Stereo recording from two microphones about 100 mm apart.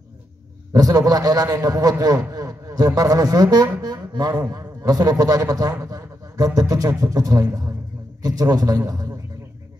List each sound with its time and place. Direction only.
0.7 s a man's voice: 40° right (ahead or behind)